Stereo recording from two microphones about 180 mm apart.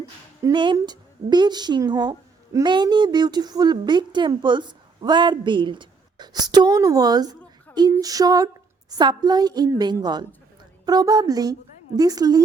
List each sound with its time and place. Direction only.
0.4 s a woman's voice: 25° right (ahead or behind)